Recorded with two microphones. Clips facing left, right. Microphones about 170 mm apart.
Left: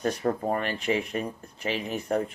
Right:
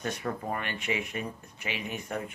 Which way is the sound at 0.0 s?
35° left (ahead or behind).